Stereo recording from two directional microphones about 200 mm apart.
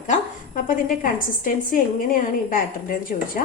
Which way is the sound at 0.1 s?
45° left (ahead or behind).